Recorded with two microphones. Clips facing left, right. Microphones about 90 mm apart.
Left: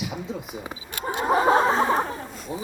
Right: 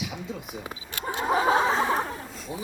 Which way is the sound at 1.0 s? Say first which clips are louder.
Left 3 dB; 5° left (ahead or behind).